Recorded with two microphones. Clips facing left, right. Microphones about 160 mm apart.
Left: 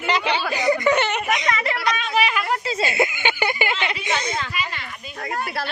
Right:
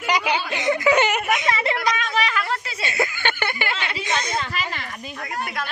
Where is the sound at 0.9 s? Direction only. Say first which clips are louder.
Right 2 dB; 10° right (ahead or behind).